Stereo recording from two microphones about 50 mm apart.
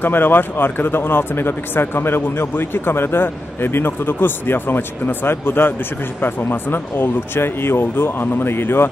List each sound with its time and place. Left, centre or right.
0.0 s a man's voice: left